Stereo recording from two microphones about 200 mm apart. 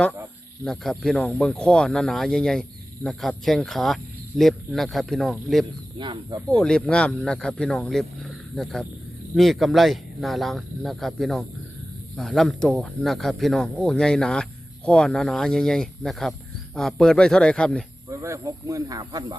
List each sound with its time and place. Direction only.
0.6 s speech: centre (ahead or behind)
6.0 s speech: 20° right (ahead or behind)
6.6 s speech: 5° left (ahead or behind)
18.1 s speech: 15° right (ahead or behind)